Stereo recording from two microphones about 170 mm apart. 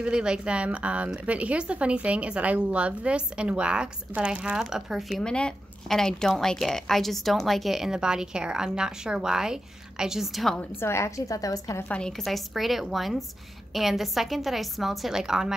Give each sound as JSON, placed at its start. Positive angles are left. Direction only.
{"t": 0.0, "sound": "speech", "side_deg": -5}
{"t": 10.8, "sound": "a woman's voice", "side_deg": 15}
{"t": 11.9, "sound": "speech", "side_deg": 5}